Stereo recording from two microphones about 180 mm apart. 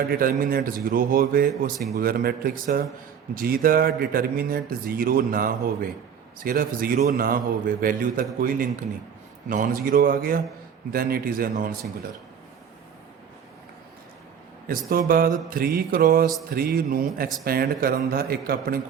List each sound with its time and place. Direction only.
0.1 s speech: 55° right (ahead or behind)
14.7 s speech: 55° right (ahead or behind)